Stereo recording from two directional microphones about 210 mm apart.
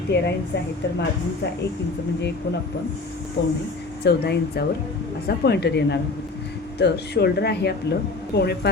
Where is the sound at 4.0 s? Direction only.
50° left (ahead or behind).